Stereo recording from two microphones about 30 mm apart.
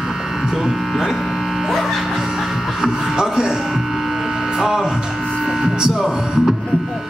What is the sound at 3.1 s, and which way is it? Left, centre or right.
Hum, right.